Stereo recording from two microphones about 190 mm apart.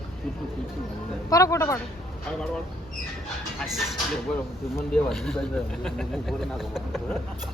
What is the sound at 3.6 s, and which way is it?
Speech, centre (ahead or behind).